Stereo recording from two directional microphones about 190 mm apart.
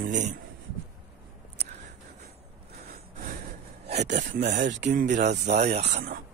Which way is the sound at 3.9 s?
40° right (ahead or behind).